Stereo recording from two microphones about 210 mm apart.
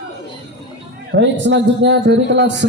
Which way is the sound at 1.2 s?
60° right (ahead or behind).